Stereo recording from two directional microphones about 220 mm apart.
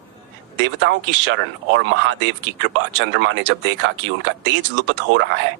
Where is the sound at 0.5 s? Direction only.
55° right (ahead or behind).